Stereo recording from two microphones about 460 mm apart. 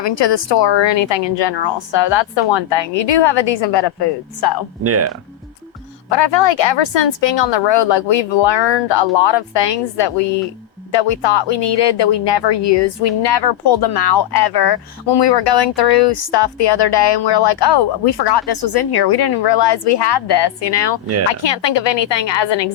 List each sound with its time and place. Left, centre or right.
0.0 s speech: left
4.8 s speech: right
6.1 s speech: left